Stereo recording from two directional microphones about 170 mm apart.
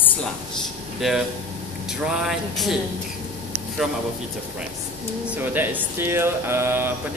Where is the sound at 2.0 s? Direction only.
5° right (ahead or behind).